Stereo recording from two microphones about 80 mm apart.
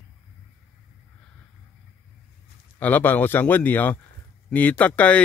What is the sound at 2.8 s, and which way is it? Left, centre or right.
Speech, left.